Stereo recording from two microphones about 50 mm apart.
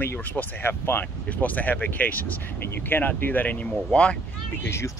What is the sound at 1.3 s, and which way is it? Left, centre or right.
Speech, left.